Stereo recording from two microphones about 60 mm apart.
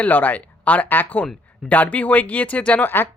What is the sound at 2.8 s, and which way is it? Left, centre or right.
Speech, left.